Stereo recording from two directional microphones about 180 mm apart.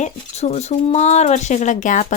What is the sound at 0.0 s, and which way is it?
Speech, 40° left (ahead or behind).